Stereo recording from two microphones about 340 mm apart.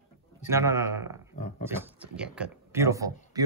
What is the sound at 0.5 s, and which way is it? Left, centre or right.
Speech, centre.